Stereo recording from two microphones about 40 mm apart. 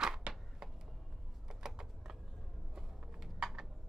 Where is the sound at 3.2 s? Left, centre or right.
Centre.